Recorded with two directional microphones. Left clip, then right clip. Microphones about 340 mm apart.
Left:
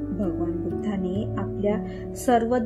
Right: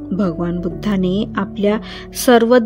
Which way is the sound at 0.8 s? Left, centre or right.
Right.